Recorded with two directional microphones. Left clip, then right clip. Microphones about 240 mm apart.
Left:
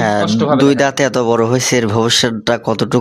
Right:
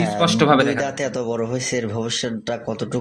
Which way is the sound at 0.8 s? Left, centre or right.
Left.